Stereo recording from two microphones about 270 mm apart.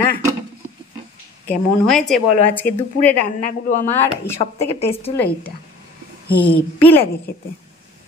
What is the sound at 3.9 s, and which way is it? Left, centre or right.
Speech, centre.